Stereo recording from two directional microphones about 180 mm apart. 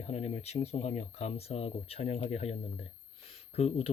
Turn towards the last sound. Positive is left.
turn(degrees=35)  # may be behind; listen again after turning